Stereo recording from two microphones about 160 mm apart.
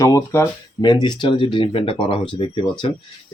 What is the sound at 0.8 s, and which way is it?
Speech, 30° left (ahead or behind).